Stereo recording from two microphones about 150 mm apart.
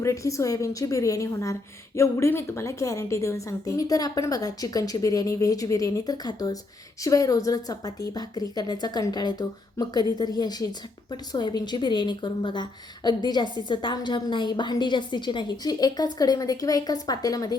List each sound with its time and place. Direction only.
0.0 s a woman's voice: 20° left (ahead or behind)